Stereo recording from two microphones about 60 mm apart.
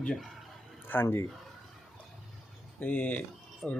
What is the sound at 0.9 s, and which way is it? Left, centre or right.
Speech, left.